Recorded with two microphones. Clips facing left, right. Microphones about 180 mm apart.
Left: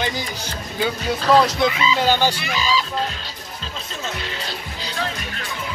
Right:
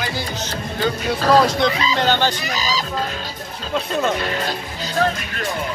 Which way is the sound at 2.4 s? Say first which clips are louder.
Left 1 dB; 40° right (ahead or behind).